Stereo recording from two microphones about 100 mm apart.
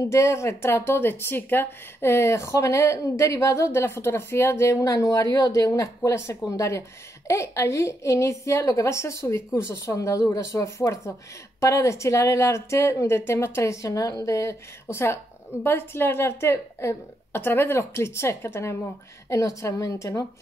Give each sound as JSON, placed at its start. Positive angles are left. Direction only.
{"t": 0.0, "sound": "a woman's voice", "side_deg": 30}